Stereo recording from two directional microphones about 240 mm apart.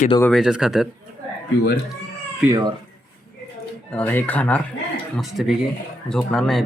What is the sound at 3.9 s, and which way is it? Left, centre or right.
Speech, centre.